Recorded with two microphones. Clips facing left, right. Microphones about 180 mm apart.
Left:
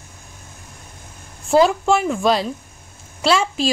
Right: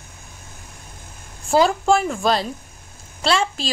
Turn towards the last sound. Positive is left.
turn(degrees=5)  # may be behind; listen again after turning